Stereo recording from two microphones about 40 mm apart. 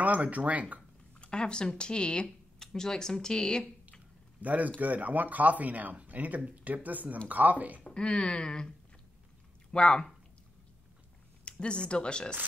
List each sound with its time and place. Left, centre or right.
0.0 s speech: right
1.2 s speech: left
4.4 s a man's voice: right
7.8 s speech: left
11.6 s speech: left